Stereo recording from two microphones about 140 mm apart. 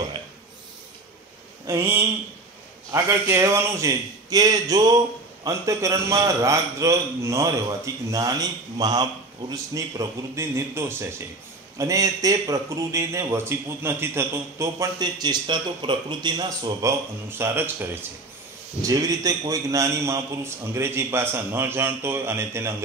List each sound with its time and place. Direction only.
1.7 s a man's voice: 20° right (ahead or behind)